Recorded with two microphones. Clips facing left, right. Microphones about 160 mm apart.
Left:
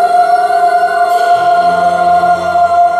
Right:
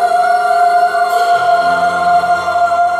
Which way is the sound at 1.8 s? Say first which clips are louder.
Left 3 dB; 35° left (ahead or behind).